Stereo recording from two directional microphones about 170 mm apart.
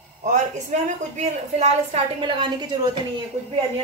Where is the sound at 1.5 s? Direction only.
35° right (ahead or behind).